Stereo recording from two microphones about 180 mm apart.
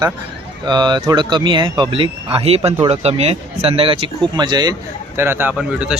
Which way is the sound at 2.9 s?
35° right (ahead or behind).